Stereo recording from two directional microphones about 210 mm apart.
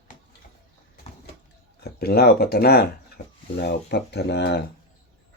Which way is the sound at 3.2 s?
35° left (ahead or behind).